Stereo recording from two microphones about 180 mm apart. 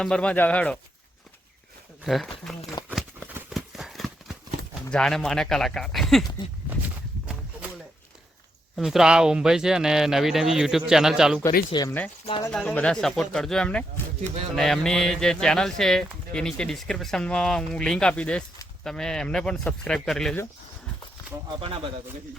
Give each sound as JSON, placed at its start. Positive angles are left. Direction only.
{"t": 0.0, "sound": "speech", "side_deg": 5}
{"t": 2.0, "sound": "speech", "side_deg": 0}
{"t": 2.8, "sound": "a sound", "side_deg": 25}
{"t": 3.5, "sound": "clip-clop", "side_deg": 0}
{"t": 4.9, "sound": "speech", "side_deg": 5}
{"t": 6.8, "sound": "walk", "side_deg": -10}
{"t": 8.7, "sound": "speech", "side_deg": 0}
{"t": 11.7, "sound": "speech", "side_deg": 20}
{"t": 12.5, "sound": "speech", "side_deg": 5}